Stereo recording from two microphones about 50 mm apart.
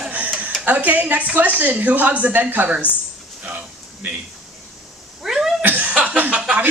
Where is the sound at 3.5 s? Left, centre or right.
Right.